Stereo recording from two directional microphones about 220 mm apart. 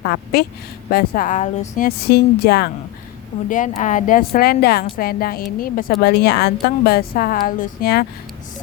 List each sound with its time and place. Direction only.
0.0 s a woman's voice: 45° left (ahead or behind)
3.5 s a woman's voice: 35° left (ahead or behind)